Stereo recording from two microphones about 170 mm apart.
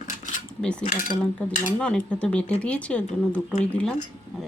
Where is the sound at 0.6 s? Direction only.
5° left (ahead or behind).